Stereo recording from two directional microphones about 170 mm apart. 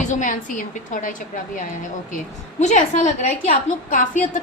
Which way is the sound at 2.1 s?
45° left (ahead or behind).